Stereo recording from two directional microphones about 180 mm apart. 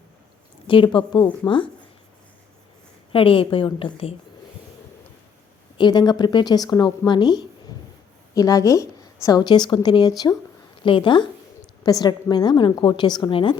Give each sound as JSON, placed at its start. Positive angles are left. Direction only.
{"t": 0.7, "sound": "a woman's voice", "side_deg": 25}
{"t": 3.1, "sound": "a woman's voice", "side_deg": 30}
{"t": 5.7, "sound": "a woman's voice", "side_deg": 25}